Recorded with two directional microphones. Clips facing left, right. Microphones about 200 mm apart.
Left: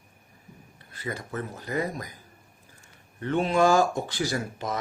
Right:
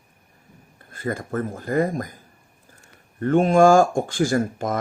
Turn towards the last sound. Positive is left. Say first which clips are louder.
# right 8 dB
turn(degrees=-50)  # may be behind; listen again after turning